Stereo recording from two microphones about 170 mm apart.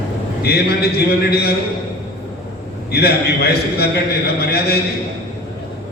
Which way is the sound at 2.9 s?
70° left (ahead or behind).